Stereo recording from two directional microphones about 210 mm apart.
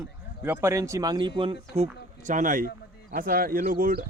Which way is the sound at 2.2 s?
40° right (ahead or behind).